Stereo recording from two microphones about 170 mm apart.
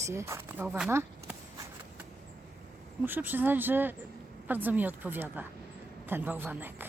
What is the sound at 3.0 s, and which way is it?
A man's voice, 10° right (ahead or behind).